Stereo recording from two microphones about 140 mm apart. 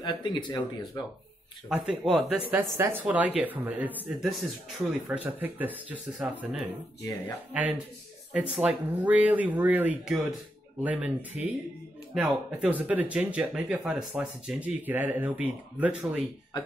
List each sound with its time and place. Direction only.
0.0 s speech: 35° left (ahead or behind)
1.7 s speech: 5° right (ahead or behind)
7.0 s speech: 20° left (ahead or behind)
7.5 s speech: 10° right (ahead or behind)